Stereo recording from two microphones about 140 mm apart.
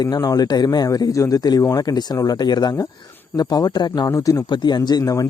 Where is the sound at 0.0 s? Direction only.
30° left (ahead or behind).